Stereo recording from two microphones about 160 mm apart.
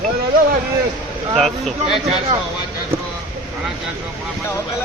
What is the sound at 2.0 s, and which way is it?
Speech, 40° right (ahead or behind).